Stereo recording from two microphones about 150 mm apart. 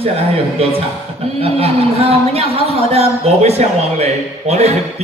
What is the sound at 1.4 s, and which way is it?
Speech, 40° right (ahead or behind).